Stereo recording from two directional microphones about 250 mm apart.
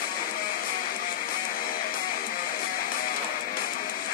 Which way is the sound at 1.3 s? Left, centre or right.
Left.